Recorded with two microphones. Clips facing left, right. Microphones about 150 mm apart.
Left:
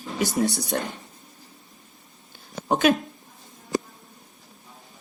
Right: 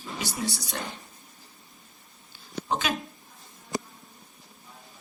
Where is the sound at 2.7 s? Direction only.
55° left (ahead or behind).